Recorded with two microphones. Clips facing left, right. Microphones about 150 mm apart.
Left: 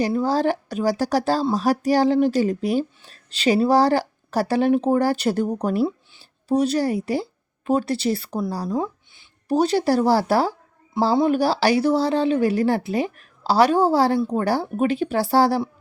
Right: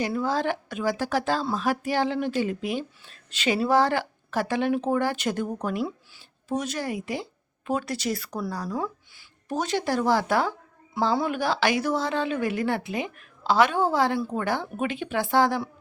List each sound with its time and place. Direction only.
0.0 s a woman's voice: 35° left (ahead or behind)